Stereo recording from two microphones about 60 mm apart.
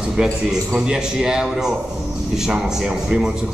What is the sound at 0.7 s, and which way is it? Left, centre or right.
A man's voice, centre.